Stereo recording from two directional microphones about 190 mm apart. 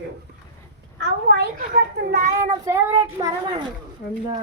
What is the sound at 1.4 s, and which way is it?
Speech, 60° right (ahead or behind).